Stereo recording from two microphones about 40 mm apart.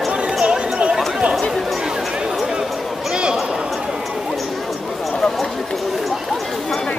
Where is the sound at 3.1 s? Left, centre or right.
Right.